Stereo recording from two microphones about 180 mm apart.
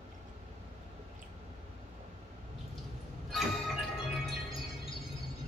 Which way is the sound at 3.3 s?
Centre (ahead or behind).